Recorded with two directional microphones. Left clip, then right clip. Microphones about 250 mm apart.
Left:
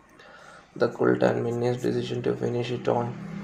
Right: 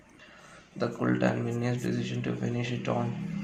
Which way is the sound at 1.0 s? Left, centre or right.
Centre.